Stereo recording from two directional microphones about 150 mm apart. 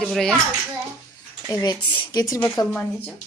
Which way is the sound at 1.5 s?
20° left (ahead or behind).